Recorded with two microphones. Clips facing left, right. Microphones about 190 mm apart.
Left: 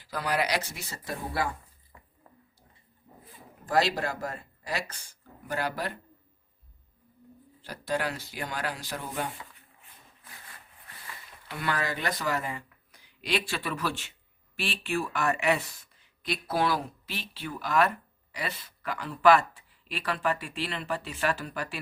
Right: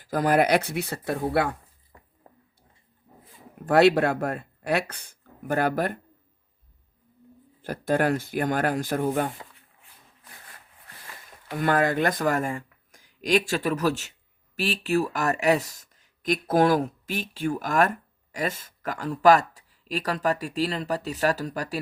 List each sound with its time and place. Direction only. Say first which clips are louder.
0.0 s speech: right 8 dB; 50° right (ahead or behind)
2.3 s a sound: right 4 dB; 35° right (ahead or behind)
3.7 s speech: right 9 dB; 60° right (ahead or behind)
7.6 s speech: right 7 dB; 50° right (ahead or behind)
11.0 s speech: even; 45° right (ahead or behind)